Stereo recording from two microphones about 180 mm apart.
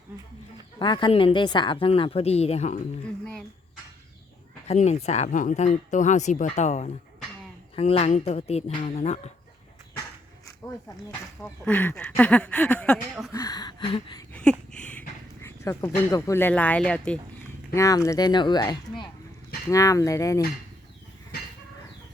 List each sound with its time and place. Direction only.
0.8 s speech: 25° left (ahead or behind)
4.7 s speech: 40° left (ahead or behind)
11.4 s speech: 5° left (ahead or behind)
13.3 s speech: 20° left (ahead or behind)
14.7 s a sound: 5° left (ahead or behind)
16.1 s speech: 15° left (ahead or behind)
17.7 s speech: 20° left (ahead or behind)